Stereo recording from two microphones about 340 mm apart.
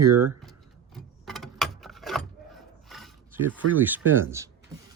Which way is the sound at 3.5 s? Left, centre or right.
Centre.